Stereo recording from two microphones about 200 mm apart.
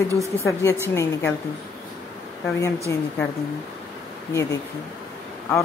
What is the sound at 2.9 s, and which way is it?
Speech, 15° left (ahead or behind).